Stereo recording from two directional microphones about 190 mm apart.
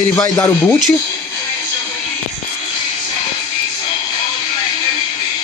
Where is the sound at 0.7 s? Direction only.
Centre (ahead or behind).